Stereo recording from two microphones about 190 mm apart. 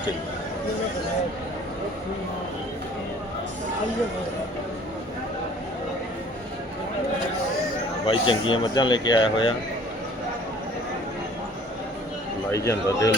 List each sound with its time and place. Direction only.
8.0 s speech: 25° left (ahead or behind)
12.5 s speech: 15° left (ahead or behind)